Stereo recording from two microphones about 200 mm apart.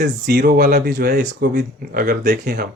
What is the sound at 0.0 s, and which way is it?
Speech, 45° right (ahead or behind).